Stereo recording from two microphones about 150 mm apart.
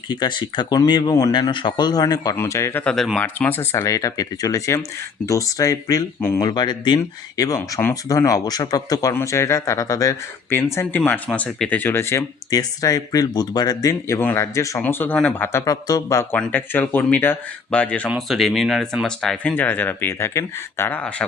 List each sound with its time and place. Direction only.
0.1 s speech: 30° left (ahead or behind)
2.8 s speech: centre (ahead or behind)
3.3 s speech: 15° left (ahead or behind)
15.6 s speech: 25° left (ahead or behind)